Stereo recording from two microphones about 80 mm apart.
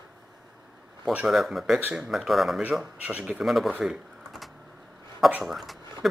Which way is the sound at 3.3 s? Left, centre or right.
Centre.